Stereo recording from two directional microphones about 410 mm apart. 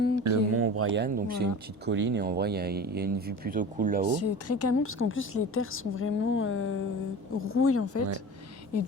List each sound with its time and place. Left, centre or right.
0.2 s speech: right
4.2 s a woman's voice: left